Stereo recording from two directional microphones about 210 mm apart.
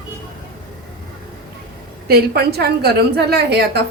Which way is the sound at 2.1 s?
50° right (ahead or behind).